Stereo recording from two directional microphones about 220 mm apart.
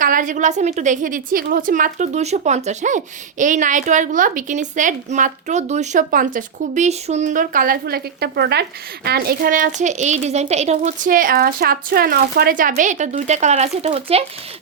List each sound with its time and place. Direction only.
0.0 s a woman's voice: 35° right (ahead or behind)